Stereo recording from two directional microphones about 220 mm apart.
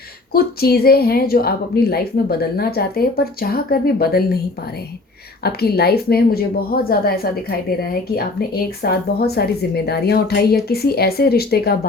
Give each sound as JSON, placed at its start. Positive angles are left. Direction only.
{"t": 0.3, "sound": "a woman's voice", "side_deg": 45}
{"t": 5.4, "sound": "a woman's voice", "side_deg": 45}